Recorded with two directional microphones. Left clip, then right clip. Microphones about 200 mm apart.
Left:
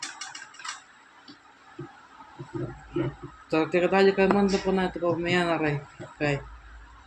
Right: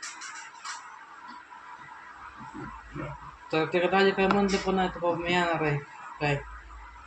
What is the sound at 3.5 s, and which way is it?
Speech, 10° left (ahead or behind).